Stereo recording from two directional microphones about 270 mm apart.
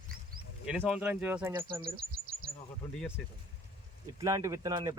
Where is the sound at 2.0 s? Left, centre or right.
Right.